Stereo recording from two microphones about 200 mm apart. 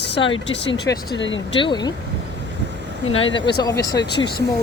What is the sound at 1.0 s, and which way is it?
Speech, 65° left (ahead or behind).